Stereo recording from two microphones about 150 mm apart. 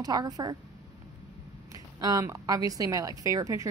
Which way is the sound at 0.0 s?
25° right (ahead or behind).